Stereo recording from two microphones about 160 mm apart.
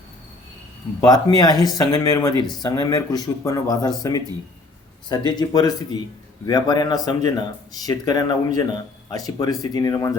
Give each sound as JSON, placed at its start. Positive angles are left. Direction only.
{"t": 1.0, "sound": "speech", "side_deg": 25}
{"t": 5.0, "sound": "speech", "side_deg": 25}